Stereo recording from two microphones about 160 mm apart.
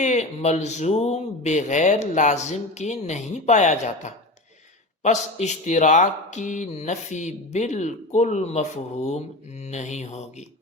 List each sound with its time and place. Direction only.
0.0 s speech: 45° left (ahead or behind)